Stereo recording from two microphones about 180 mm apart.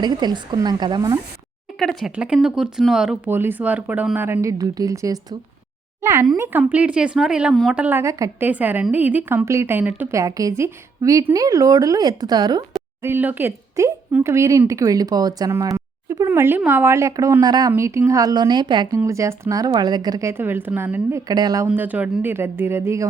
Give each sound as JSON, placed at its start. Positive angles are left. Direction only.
{"t": 0.0, "sound": "speech", "side_deg": -25}
{"t": 1.8, "sound": "a woman's voice", "side_deg": 0}
{"t": 13.0, "sound": "a woman's voice", "side_deg": -10}
{"t": 21.7, "sound": "a woman's voice", "side_deg": -10}